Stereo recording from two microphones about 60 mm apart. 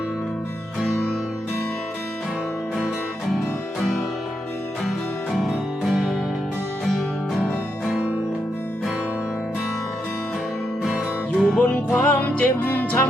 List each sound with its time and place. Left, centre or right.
3.2 s music: centre
5.3 s music: centre
11.3 s music: centre
11.6 s music: left